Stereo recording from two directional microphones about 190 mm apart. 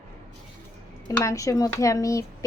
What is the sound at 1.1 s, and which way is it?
Speech, 15° left (ahead or behind).